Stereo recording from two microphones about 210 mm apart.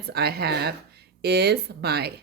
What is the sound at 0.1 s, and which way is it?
Speech, 50° right (ahead or behind).